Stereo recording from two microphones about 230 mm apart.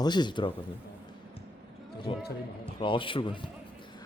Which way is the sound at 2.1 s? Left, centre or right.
Left.